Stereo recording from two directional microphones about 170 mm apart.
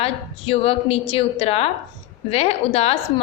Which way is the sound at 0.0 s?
35° left (ahead or behind).